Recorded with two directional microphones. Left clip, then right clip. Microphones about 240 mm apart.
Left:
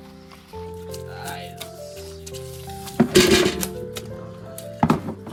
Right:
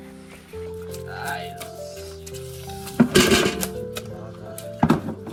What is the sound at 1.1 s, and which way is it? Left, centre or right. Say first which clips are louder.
Music: right 7 dB; centre.